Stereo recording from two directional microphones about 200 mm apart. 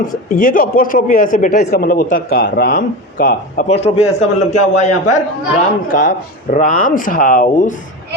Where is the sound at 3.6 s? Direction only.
30° left (ahead or behind).